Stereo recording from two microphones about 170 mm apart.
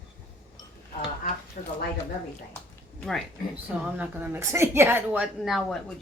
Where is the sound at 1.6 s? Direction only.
55° left (ahead or behind).